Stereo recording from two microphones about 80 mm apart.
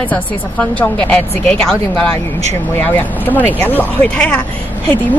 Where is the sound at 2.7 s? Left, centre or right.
Left.